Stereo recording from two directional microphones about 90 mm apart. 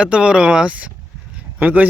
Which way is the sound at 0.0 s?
10° right (ahead or behind).